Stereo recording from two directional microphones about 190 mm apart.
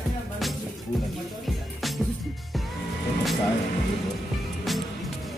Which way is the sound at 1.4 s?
Centre (ahead or behind).